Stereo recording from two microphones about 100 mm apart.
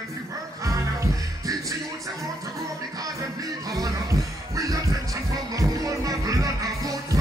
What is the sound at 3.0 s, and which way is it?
Music, 35° right (ahead or behind).